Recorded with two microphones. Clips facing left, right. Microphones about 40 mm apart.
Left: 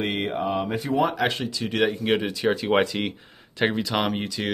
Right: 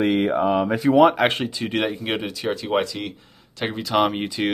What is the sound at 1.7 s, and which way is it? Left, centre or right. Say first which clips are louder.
Speech: left 3 dB; centre.